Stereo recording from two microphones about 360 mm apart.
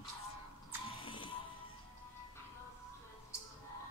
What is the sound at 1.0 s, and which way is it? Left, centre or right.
Music, centre.